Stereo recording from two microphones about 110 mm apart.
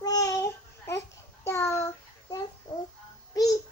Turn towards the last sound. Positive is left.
turn(degrees=35)  # may be behind; listen again after turning